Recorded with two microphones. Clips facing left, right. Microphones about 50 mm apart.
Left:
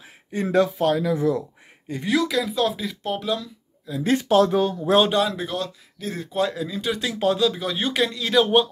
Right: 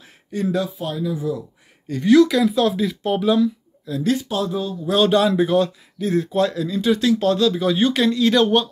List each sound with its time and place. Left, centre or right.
0.3 s speech: left
0.7 s speech: left
1.9 s speech: centre
2.1 s speech: centre
3.9 s speech: centre
4.2 s speech: left
5.1 s speech: centre